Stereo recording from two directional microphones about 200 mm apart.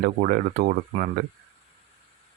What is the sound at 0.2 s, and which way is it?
Speech, 45° right (ahead or behind).